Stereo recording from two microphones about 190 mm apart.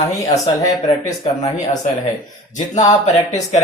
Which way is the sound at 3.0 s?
35° left (ahead or behind).